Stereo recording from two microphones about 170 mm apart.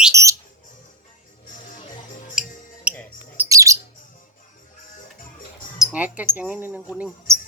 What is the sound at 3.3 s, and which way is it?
Bird, 20° right (ahead or behind).